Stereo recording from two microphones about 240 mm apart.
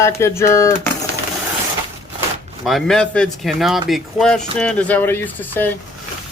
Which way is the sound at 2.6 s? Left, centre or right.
Centre.